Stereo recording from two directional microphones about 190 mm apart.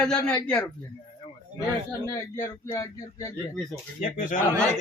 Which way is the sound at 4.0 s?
45° left (ahead or behind).